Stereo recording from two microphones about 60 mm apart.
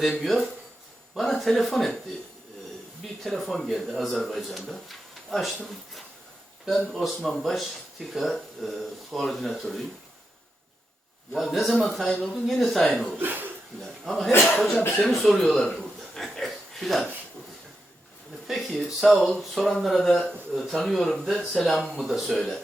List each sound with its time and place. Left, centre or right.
0.0 s speech: centre
3.2 s speech: centre
6.9 s speech: centre
11.3 s speech: centre
13.1 s a sound: right
14.0 s a man's voice: centre
15.4 s a sound: centre
18.4 s speech: centre
22.0 s speech: centre
22.3 s speech: centre